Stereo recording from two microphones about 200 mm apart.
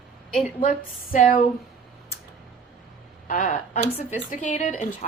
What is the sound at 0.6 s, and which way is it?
Speech, 40° left (ahead or behind).